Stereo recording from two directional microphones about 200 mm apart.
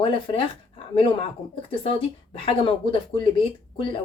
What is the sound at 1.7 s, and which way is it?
A woman's voice, 25° left (ahead or behind).